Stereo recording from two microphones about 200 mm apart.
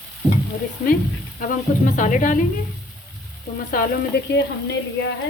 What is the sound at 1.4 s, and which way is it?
Speech, 40° left (ahead or behind).